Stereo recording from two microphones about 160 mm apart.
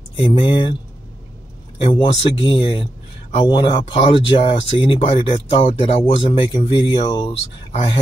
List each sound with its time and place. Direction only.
0.1 s speech: 35° left (ahead or behind)
1.8 s speech: 35° left (ahead or behind)